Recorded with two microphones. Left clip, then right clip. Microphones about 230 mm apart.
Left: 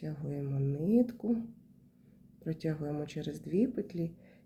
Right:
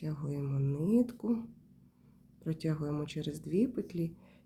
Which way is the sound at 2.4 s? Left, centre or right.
Right.